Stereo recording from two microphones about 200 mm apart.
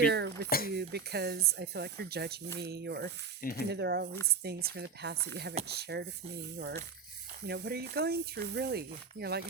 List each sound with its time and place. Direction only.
0.0 s speech: 55° right (ahead or behind)